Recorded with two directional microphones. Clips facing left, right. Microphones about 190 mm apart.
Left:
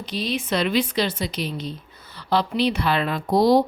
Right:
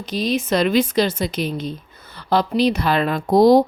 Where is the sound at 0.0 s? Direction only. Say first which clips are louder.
Right 5 dB; 45° right (ahead or behind).